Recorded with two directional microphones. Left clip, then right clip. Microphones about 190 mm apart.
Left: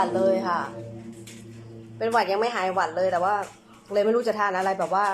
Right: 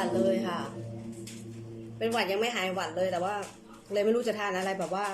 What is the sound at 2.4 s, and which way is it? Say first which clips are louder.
Speech: left 7 dB; 35° left (ahead or behind).